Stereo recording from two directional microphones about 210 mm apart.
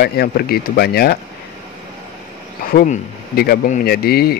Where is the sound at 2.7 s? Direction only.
45° left (ahead or behind).